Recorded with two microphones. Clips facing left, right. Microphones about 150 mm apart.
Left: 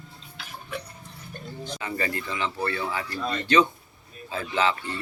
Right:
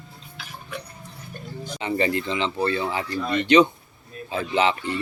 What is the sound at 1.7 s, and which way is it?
Speech, 25° right (ahead or behind).